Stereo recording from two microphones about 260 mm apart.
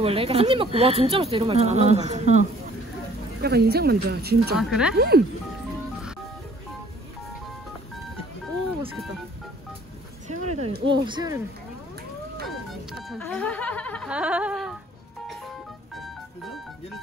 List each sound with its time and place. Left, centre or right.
0.0 s speech: right
3.4 s speech: right
4.6 s speech: centre
4.9 s speech: right
10.2 s a sound: right
10.9 s speech: centre
12.4 s speech: centre
15.9 s music: centre